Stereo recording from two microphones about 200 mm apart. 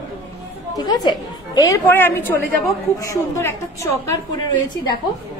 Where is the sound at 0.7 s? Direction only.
20° left (ahead or behind).